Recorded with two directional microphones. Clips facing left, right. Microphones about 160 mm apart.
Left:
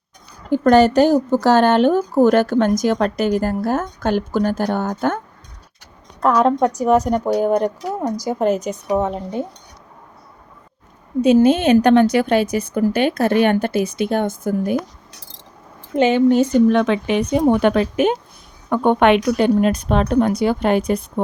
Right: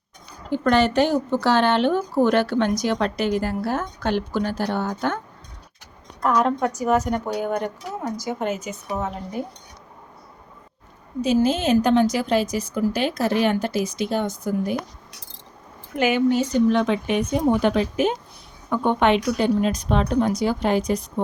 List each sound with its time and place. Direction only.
0.5 s speech: 45° left (ahead or behind)
6.2 s a woman's voice: 35° left (ahead or behind)
11.2 s a woman's voice: 60° left (ahead or behind)
16.3 s speech: 50° left (ahead or behind)
16.8 s a woman's voice: 85° left; by 21.0 s 55° left (ahead or behind)